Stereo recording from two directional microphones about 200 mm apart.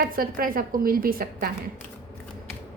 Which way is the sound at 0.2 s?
45° right (ahead or behind).